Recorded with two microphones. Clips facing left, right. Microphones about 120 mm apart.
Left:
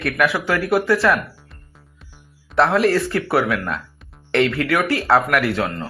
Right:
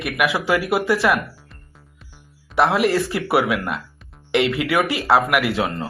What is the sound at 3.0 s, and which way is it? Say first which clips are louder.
Speech: even; 20° right (ahead or behind).